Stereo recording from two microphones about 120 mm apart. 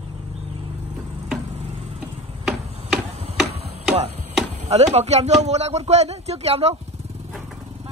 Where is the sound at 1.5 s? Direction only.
60° right (ahead or behind).